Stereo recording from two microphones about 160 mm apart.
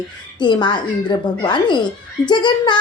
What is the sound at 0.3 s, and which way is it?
A woman's voice, 30° left (ahead or behind).